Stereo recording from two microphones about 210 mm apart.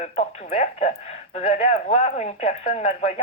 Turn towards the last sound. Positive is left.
turn(degrees=35)  # may be behind; listen again after turning